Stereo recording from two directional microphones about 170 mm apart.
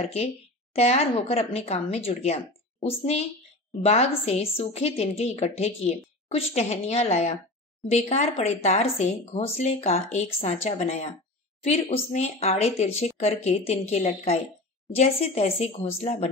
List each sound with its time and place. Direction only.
0.0 s speech: 40° left (ahead or behind)